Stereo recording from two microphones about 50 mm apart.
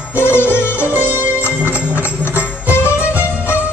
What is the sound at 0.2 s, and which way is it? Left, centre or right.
Music, left.